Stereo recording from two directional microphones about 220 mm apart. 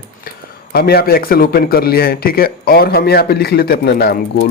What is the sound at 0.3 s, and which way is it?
A man's voice, 45° left (ahead or behind).